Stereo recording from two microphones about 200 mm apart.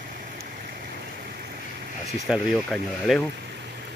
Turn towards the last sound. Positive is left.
turn(degrees=0)  # may be behind; listen again after turning